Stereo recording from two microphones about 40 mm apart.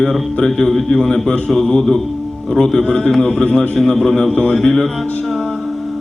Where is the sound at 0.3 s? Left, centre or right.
Centre.